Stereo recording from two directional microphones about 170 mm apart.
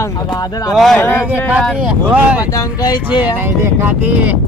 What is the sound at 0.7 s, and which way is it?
Speech, centre (ahead or behind).